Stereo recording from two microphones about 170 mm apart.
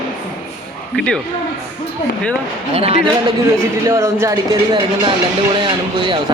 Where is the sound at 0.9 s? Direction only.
5° left (ahead or behind).